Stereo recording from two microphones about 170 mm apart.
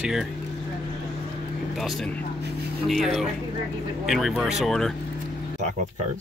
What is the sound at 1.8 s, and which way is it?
Speech, centre (ahead or behind).